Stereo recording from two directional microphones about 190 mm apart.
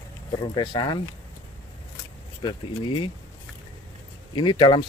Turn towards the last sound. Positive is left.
turn(degrees=25)  # may be behind; listen again after turning